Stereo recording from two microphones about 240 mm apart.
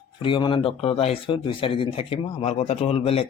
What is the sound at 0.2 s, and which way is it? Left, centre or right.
Speech, left.